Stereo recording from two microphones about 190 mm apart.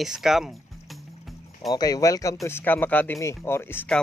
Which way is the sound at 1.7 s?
20° left (ahead or behind).